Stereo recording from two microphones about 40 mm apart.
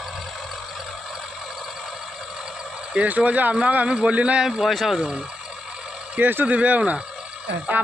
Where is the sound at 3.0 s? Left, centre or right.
Right.